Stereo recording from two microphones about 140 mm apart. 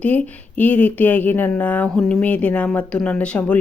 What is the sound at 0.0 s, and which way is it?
Speech, 10° left (ahead or behind).